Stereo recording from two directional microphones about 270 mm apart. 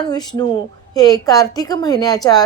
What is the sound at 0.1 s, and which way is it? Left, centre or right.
Speech, centre.